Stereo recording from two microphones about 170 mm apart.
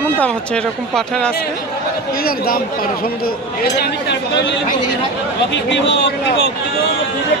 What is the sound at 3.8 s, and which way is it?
A man's voice, 85° left.